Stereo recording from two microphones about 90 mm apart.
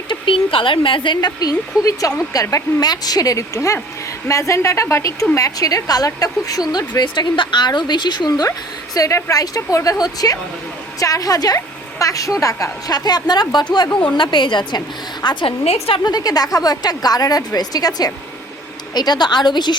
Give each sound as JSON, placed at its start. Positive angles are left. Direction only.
{"t": 0.1, "sound": "a woman's voice", "side_deg": 75}
{"t": 9.0, "sound": "a woman's voice", "side_deg": 35}
{"t": 16.0, "sound": "speech", "side_deg": 45}